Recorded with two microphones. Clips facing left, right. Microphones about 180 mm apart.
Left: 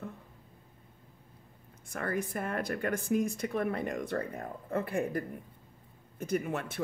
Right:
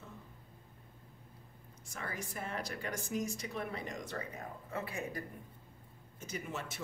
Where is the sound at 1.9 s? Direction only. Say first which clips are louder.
Left 10 dB; 55° left (ahead or behind).